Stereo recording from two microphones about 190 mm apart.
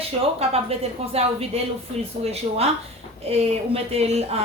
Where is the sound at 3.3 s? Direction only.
30° right (ahead or behind).